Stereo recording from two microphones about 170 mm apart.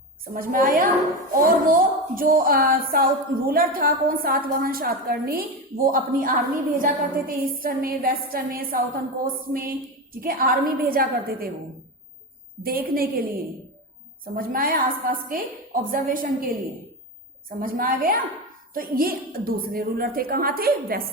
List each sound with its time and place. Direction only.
0.3 s a woman's voice: 55° right (ahead or behind)
12.6 s a woman's voice: 60° right (ahead or behind)
14.3 s a woman's voice: 60° right (ahead or behind)
17.6 s a woman's voice: 55° right (ahead or behind)